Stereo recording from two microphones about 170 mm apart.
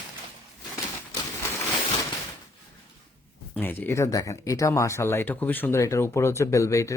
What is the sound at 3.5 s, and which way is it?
Speech, 10° left (ahead or behind).